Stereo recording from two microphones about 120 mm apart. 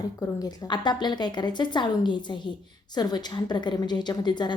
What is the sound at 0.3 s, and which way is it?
A woman's voice, 30° left (ahead or behind).